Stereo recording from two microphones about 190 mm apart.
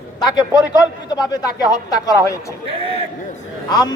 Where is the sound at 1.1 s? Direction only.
20° left (ahead or behind).